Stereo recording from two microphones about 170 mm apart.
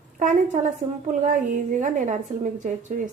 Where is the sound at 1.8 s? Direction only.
45° right (ahead or behind).